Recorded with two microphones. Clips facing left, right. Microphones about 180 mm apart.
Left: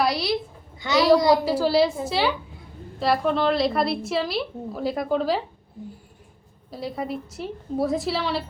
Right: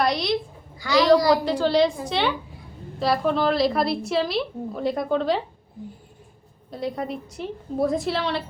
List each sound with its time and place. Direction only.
0.0 s a sound: 5° left (ahead or behind)
0.8 s a woman's voice: 20° left (ahead or behind)
1.5 s a woman's voice: 5° left (ahead or behind)
6.7 s a woman's voice: centre (ahead or behind)